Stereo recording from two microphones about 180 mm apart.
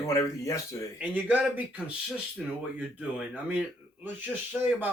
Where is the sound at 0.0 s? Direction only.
15° left (ahead or behind).